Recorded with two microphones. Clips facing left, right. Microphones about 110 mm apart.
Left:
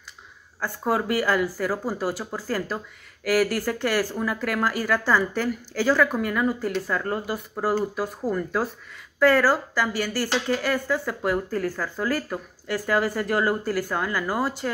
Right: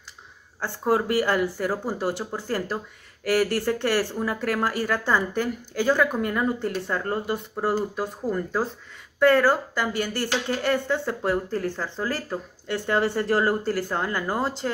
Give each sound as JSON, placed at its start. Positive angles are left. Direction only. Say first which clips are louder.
{"t": 0.6, "sound": "speech", "louder": "right 2 dB", "side_deg": -30}